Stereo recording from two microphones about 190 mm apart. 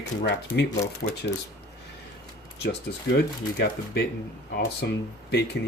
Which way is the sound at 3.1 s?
65° left (ahead or behind).